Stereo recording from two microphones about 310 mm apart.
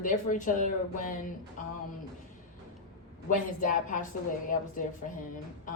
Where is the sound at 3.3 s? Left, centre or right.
Left.